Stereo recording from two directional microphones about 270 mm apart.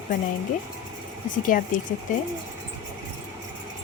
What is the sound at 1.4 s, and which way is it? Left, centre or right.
Speech, left.